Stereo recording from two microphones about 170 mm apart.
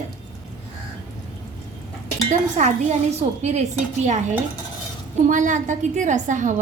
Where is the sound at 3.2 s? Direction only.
40° right (ahead or behind).